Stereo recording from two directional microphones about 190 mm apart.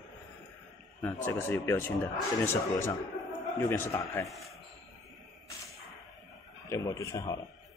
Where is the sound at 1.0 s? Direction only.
10° left (ahead or behind).